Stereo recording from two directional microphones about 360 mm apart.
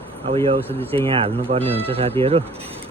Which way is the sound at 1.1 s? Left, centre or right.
Centre.